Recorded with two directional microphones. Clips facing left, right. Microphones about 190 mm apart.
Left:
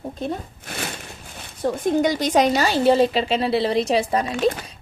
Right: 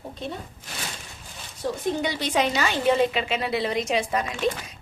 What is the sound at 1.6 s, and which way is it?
A woman's voice, 45° left (ahead or behind).